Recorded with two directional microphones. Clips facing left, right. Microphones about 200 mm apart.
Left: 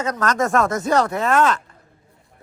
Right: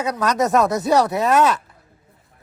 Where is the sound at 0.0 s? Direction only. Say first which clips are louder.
Right 1 dB; 10° right (ahead or behind).